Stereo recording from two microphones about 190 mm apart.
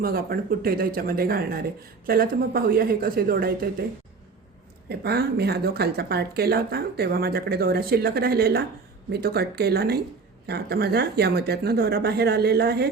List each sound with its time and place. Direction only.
0.0 s speech: 50° right (ahead or behind)
4.9 s speech: 60° right (ahead or behind)